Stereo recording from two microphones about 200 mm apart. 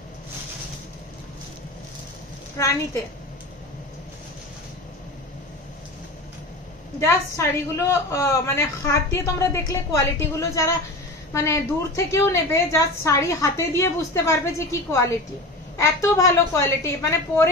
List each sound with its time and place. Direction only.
2.5 s a woman's voice: 15° left (ahead or behind)
7.0 s a woman's voice: 15° left (ahead or behind)